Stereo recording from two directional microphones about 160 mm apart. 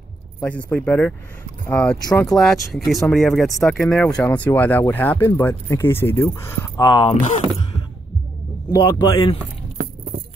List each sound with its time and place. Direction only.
0.4 s speech: 10° left (ahead or behind)
2.0 s speech: 25° left (ahead or behind)
2.3 s speech: centre (ahead or behind); by 7.2 s 30° left (ahead or behind)
8.7 s speech: 30° left (ahead or behind)